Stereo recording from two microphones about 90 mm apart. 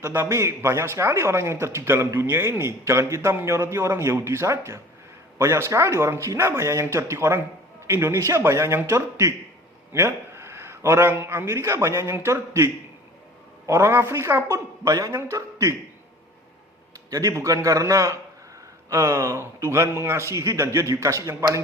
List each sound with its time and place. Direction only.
0.0 s a man's voice: 30° right (ahead or behind)
14.8 s speech: 45° right (ahead or behind)
15.1 s a man's voice: 35° right (ahead or behind)
17.1 s a man's voice: 40° right (ahead or behind)